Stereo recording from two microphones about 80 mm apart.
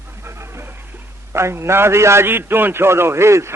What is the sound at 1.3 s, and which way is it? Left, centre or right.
A man's voice, right.